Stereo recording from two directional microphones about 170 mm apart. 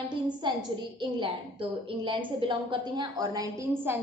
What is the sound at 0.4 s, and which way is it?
A woman's voice, 25° right (ahead or behind).